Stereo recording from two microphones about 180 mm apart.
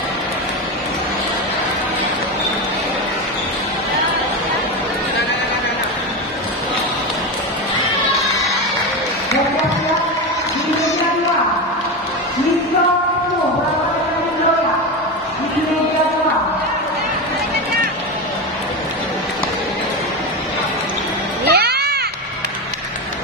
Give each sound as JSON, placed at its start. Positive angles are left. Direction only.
{"t": 21.5, "sound": "music", "side_deg": -65}